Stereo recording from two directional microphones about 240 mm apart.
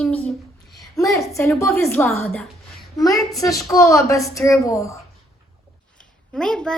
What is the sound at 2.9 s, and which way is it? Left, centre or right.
A child's voice, centre.